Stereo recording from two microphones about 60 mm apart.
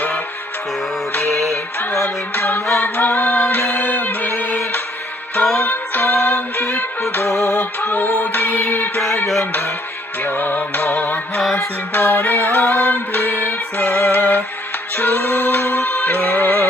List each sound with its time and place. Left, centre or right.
1.1 s music: left
2.8 s a capella: left
3.7 s music: left
5.6 s music: left
10.2 s music: left
15.4 s music: left
16.0 s music: left